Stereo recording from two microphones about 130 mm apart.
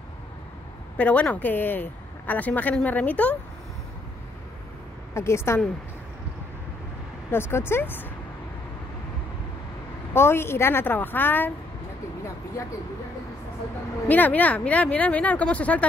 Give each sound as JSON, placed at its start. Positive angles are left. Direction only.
{"t": 0.9, "sound": "speech", "side_deg": 10}
{"t": 5.1, "sound": "a woman's voice", "side_deg": 20}
{"t": 7.2, "sound": "speech", "side_deg": 15}
{"t": 10.1, "sound": "speech", "side_deg": 20}
{"t": 14.0, "sound": "speech", "side_deg": 15}